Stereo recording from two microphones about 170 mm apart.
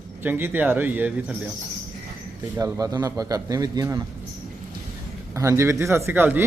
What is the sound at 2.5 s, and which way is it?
A man's voice, 20° right (ahead or behind).